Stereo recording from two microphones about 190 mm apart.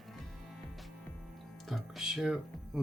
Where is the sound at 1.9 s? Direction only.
Centre (ahead or behind).